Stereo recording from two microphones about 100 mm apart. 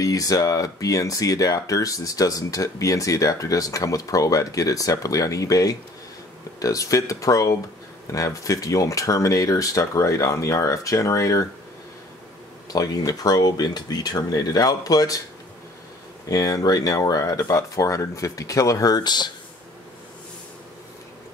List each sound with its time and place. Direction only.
0.0 s speech: 35° left (ahead or behind)
12.6 s speech: 40° left (ahead or behind)
16.3 s speech: 35° left (ahead or behind)